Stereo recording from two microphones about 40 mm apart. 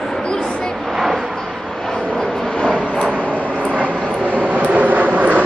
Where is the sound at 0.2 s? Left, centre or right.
Left.